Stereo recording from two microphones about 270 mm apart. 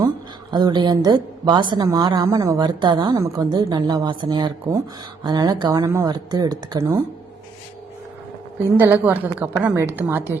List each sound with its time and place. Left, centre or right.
0.5 s a woman's voice: centre
8.8 s a woman's voice: centre